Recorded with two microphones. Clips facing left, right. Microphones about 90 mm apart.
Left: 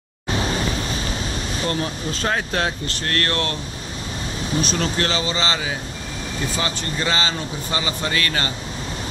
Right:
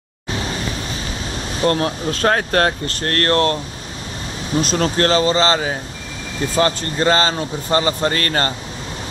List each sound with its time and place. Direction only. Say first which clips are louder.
1.6 s speech: right 8 dB; 55° right (ahead or behind); by 3.5 s 40° right (ahead or behind)
4.6 s speech: right 5 dB; 40° right (ahead or behind)